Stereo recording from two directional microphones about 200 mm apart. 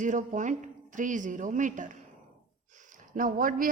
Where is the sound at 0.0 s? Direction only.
40° right (ahead or behind).